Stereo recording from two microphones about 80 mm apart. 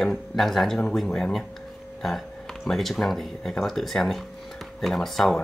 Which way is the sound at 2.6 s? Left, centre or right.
Centre.